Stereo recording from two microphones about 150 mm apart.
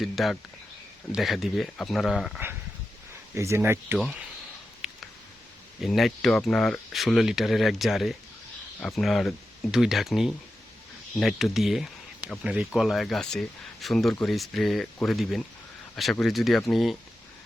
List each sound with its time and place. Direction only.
0.0 s speech: centre (ahead or behind)
3.3 s speech: 20° right (ahead or behind)
3.9 s speech: centre (ahead or behind)
4.8 s a sound: centre (ahead or behind)
5.8 s speech: centre (ahead or behind)